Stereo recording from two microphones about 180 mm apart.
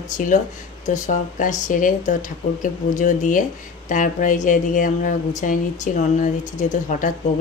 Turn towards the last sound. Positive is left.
turn(degrees=45)  # may be behind; listen again after turning